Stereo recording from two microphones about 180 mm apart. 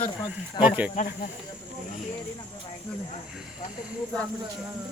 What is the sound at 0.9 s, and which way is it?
Speech, 45° left (ahead or behind).